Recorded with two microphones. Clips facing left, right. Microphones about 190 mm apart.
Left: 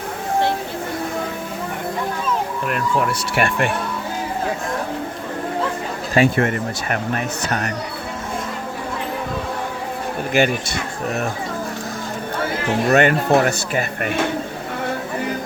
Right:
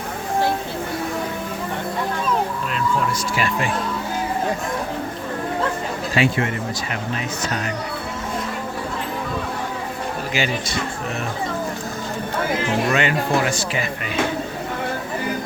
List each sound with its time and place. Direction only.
3.3 s speech: 65° left (ahead or behind)
6.1 s speech: 50° left (ahead or behind)
10.3 s speech: 55° left (ahead or behind)
12.9 s speech: 50° left (ahead or behind)